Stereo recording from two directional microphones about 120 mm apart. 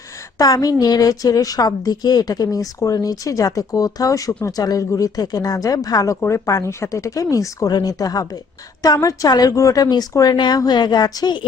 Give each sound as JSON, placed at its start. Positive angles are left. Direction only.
{"t": 0.3, "sound": "a woman's voice", "side_deg": 30}